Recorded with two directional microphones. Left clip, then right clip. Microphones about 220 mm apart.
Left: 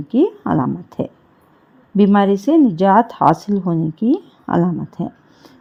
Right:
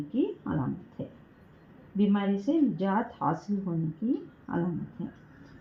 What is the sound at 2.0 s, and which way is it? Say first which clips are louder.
A woman's voice: left 15 dB; 50° left (ahead or behind).